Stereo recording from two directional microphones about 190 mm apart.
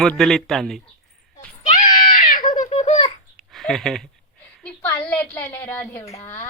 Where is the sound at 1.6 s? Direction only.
40° left (ahead or behind).